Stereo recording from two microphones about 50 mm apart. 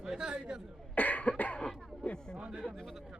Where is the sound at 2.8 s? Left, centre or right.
Centre.